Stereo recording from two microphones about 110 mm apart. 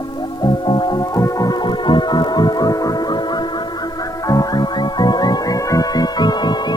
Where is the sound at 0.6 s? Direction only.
45° left (ahead or behind).